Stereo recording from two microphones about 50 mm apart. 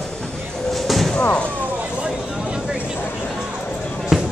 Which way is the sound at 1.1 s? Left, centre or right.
Left.